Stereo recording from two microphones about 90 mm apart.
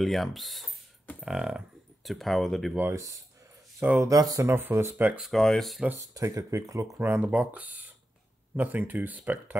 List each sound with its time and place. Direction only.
0.0 s speech: centre (ahead or behind)
2.9 s speech: 35° right (ahead or behind)
4.5 s speech: 25° right (ahead or behind)
5.2 s speech: 5° left (ahead or behind)
5.9 s speech: 35° right (ahead or behind)
7.0 s speech: 20° right (ahead or behind)